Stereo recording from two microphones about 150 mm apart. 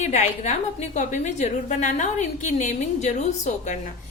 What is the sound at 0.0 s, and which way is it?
A woman's voice, 50° left (ahead or behind).